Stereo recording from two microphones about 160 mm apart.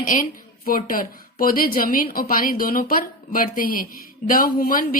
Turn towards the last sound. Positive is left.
turn(degrees=60)  # may be behind; listen again after turning